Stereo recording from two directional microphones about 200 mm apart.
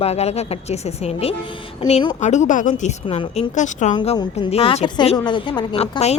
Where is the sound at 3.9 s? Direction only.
25° left (ahead or behind).